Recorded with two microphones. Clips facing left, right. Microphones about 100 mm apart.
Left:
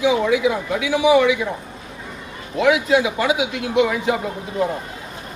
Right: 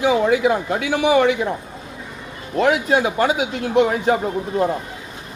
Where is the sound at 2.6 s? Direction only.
45° right (ahead or behind).